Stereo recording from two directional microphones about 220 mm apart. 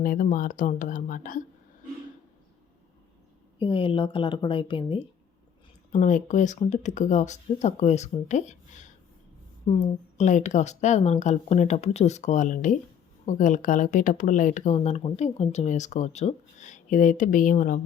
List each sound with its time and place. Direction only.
0.0 s speech: 40° left (ahead or behind)
3.6 s speech: 25° left (ahead or behind)
5.9 s speech: 35° left (ahead or behind)